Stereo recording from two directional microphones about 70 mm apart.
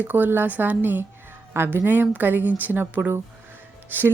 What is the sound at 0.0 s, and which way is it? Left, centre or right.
Speech, right.